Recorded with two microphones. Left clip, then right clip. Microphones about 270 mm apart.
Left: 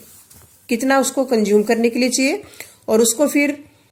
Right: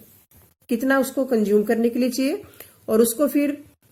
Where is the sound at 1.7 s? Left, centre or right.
Left.